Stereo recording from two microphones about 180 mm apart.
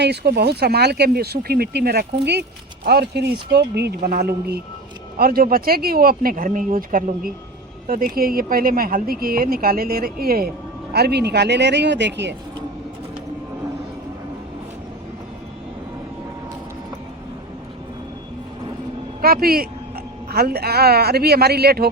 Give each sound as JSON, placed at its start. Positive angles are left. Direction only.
{"t": 0.0, "sound": "speech", "side_deg": -65}
{"t": 19.2, "sound": "speech", "side_deg": -55}